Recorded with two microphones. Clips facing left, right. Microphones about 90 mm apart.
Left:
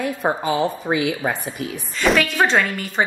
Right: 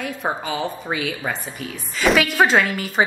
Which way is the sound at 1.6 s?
Centre (ahead or behind).